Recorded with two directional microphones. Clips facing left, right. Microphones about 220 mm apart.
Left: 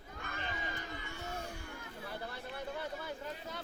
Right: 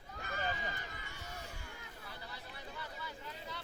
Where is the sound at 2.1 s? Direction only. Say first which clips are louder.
Left 8 dB; 55° left (ahead or behind).